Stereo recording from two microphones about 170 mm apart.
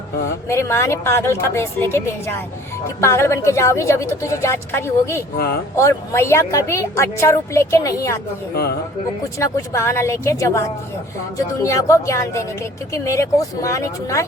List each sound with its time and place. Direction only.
0.4 s a woman's voice: 15° left (ahead or behind)
9.4 s a woman's voice: 15° left (ahead or behind)